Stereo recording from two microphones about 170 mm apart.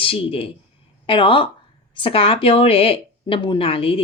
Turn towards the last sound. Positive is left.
turn(degrees=30)  # may be behind; listen again after turning